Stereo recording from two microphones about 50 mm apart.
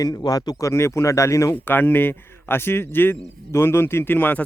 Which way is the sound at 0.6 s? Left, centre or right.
Left.